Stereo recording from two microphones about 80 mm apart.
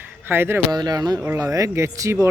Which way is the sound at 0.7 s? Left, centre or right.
Right.